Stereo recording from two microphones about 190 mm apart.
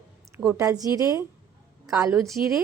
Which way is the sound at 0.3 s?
15° right (ahead or behind).